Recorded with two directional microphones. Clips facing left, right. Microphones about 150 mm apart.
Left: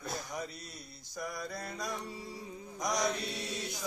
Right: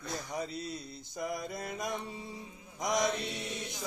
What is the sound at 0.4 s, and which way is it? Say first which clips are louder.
Mantra: right 6 dB; 25° right (ahead or behind).